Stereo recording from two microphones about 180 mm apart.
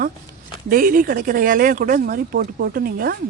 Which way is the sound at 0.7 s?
50° right (ahead or behind).